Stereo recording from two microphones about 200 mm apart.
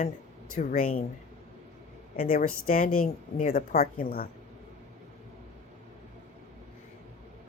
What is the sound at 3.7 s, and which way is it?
Speech, 50° left (ahead or behind).